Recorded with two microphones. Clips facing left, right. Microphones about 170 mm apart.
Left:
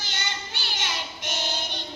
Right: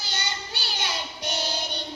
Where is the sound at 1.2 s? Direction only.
40° right (ahead or behind).